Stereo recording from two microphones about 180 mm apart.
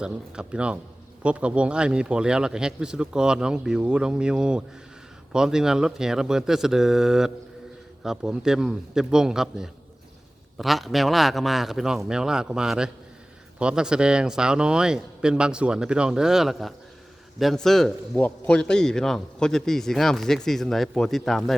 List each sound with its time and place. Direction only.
0.0 s a man's voice: 5° right (ahead or behind)